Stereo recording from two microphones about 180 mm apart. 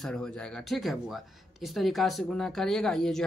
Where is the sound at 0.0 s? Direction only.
5° left (ahead or behind).